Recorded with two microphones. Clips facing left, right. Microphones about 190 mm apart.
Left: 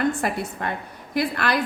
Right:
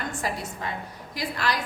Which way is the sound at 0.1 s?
60° left (ahead or behind).